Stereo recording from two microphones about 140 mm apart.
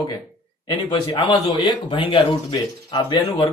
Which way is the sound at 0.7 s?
30° left (ahead or behind).